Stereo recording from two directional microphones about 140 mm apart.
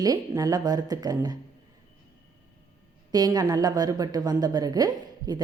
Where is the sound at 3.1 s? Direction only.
30° right (ahead or behind).